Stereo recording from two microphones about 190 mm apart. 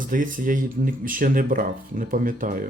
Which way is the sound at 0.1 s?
45° right (ahead or behind).